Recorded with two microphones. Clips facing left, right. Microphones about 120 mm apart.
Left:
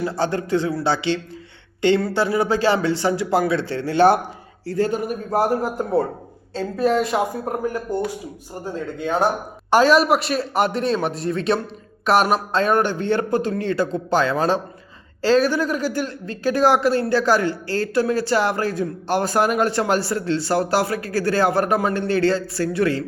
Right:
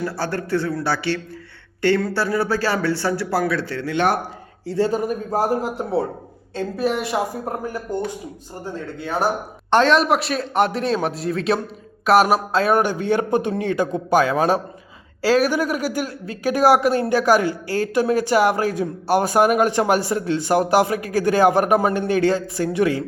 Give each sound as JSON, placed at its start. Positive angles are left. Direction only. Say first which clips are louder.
{"t": 0.0, "sound": "a man's voice", "louder": "left 2 dB", "side_deg": 20}
{"t": 4.9, "sound": "a man's voice", "louder": "right 1 dB", "side_deg": -40}
{"t": 6.6, "sound": "a woman's voice", "louder": "left 3 dB", "side_deg": -70}
{"t": 8.6, "sound": "a man's voice", "louder": "left 3 dB", "side_deg": 20}
{"t": 9.6, "sound": "a man's voice", "louder": "left 1 dB", "side_deg": 5}